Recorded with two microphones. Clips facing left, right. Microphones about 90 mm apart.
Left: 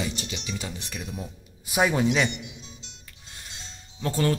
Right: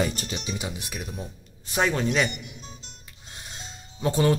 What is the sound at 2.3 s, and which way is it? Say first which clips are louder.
Music: left 1 dB; 45° right (ahead or behind).